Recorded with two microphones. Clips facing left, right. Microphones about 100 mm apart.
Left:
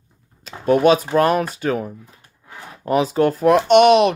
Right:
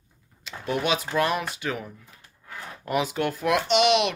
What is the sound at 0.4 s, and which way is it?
Speech, 45° left (ahead or behind).